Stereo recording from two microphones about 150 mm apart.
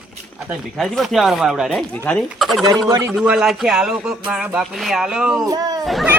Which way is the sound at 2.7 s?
25° right (ahead or behind).